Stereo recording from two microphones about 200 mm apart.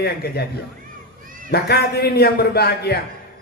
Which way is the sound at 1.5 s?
55° left (ahead or behind).